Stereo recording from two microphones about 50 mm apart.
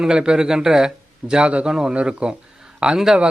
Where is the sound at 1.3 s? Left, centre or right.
Right.